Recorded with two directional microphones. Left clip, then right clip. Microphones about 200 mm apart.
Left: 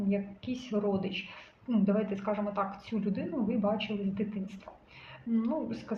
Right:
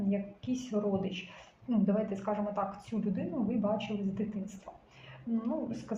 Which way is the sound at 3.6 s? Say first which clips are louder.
Left 2 dB; 25° left (ahead or behind).